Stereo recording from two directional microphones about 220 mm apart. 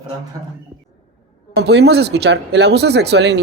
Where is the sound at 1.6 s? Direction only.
50° right (ahead or behind).